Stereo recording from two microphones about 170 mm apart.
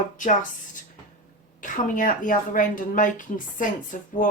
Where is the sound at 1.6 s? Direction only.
50° left (ahead or behind).